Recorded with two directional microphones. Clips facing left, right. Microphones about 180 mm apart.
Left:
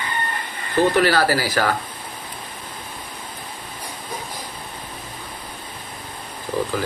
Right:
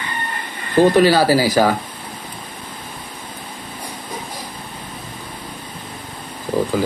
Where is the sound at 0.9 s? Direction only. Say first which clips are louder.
Right 5 dB; 15° right (ahead or behind).